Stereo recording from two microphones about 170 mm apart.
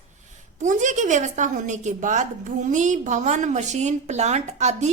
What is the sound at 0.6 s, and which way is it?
A woman's voice, 45° right (ahead or behind).